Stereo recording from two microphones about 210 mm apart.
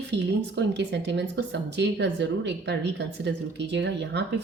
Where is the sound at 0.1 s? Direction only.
55° right (ahead or behind).